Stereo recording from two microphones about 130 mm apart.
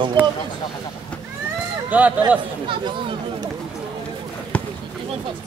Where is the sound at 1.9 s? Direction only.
10° right (ahead or behind).